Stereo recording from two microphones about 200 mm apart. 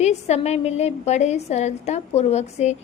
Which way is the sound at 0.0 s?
35° left (ahead or behind).